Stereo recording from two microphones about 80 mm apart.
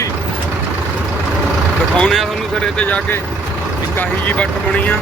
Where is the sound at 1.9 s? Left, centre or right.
Centre.